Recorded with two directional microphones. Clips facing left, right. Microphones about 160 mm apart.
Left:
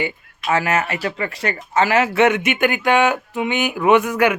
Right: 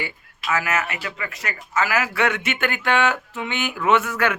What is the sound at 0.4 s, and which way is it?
Speech, 30° left (ahead or behind).